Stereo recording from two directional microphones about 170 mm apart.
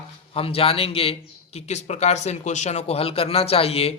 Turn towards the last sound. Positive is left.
turn(degrees=35)  # may be behind; listen again after turning